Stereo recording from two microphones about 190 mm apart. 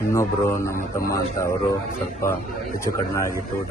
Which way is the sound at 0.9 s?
15° left (ahead or behind).